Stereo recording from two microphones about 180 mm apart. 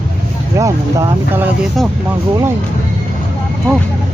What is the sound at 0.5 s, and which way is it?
Speech, 15° right (ahead or behind).